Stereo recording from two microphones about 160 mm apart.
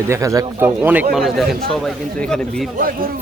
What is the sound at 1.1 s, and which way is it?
A man's voice, centre (ahead or behind).